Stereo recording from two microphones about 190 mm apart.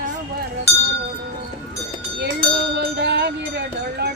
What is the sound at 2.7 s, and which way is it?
Speech, 60° right (ahead or behind).